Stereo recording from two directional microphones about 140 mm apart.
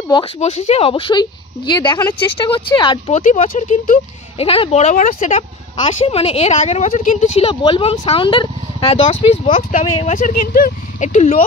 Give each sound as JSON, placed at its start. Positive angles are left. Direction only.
{"t": 0.4, "sound": "speech", "side_deg": 50}
{"t": 3.1, "sound": "speech", "side_deg": 60}
{"t": 4.4, "sound": "speech", "side_deg": 45}
{"t": 6.0, "sound": "speech", "side_deg": 45}
{"t": 7.3, "sound": "speech", "side_deg": 40}
{"t": 9.5, "sound": "speech", "side_deg": 65}